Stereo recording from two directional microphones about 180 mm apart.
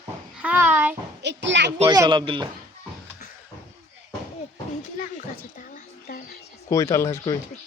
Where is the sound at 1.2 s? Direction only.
75° right (ahead or behind).